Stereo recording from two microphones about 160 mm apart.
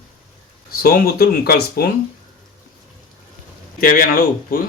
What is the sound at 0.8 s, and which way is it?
Speech, 70° left (ahead or behind).